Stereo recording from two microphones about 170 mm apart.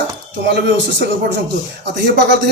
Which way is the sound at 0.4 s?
75° right (ahead or behind).